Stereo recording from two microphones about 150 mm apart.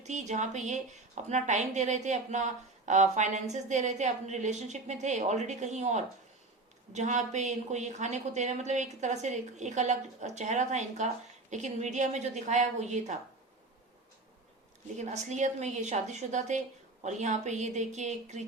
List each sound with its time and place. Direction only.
0.0 s a woman's voice: 50° right (ahead or behind)
14.9 s a woman's voice: 50° right (ahead or behind)